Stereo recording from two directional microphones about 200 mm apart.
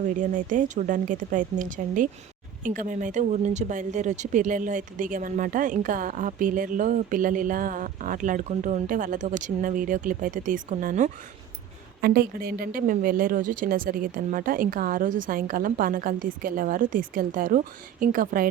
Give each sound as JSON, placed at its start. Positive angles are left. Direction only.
{"t": 0.2, "sound": "speech", "side_deg": -40}